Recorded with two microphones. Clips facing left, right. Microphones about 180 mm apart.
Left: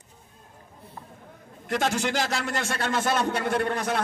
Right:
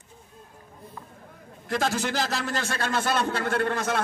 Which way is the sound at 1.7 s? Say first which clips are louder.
Left 1 dB; centre (ahead or behind).